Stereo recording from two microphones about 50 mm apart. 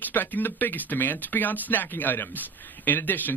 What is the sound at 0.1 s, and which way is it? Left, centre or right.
Speech, left.